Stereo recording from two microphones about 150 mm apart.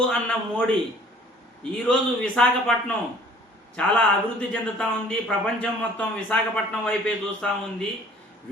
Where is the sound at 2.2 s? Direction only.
5° left (ahead or behind).